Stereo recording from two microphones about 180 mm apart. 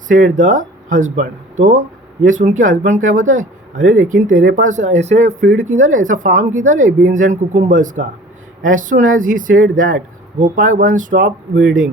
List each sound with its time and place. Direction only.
0.1 s speech: 45° right (ahead or behind)